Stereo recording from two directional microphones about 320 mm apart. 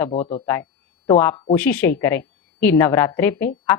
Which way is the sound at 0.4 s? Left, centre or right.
Centre.